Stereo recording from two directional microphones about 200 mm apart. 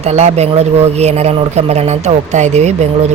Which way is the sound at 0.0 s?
35° right (ahead or behind).